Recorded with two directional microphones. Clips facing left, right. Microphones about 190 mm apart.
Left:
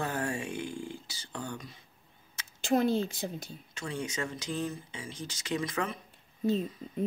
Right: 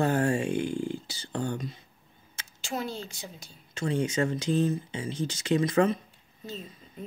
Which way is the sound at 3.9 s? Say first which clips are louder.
Right 8 dB; 25° right (ahead or behind).